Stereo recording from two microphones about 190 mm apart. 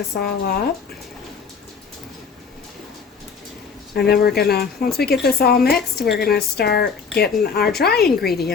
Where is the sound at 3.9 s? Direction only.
55° left (ahead or behind).